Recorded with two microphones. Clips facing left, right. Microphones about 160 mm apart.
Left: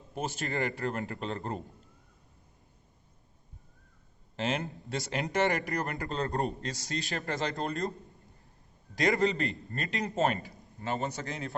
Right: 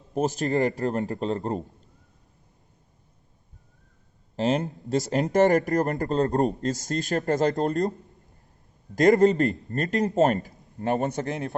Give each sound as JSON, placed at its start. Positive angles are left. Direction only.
{"t": 0.1, "sound": "a man's voice", "side_deg": -40}
{"t": 4.4, "sound": "speech", "side_deg": -40}
{"t": 9.0, "sound": "speech", "side_deg": -45}